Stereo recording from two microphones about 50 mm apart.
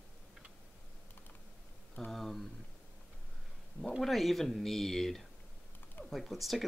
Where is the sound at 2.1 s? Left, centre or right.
Centre.